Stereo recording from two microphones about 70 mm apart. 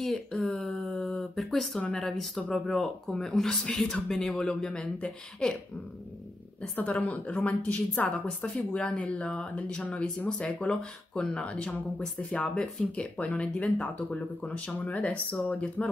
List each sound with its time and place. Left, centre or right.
0.0 s speech: centre
0.5 s a sound: centre
1.3 s speech: centre
1.8 s speech: centre
2.0 s speech: centre
4.6 s speech: centre
6.6 s a woman's voice: centre